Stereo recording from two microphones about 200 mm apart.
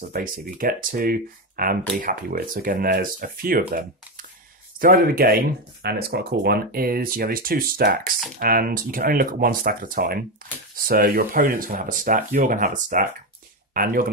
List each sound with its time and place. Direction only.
0.1 s speech: 45° right (ahead or behind)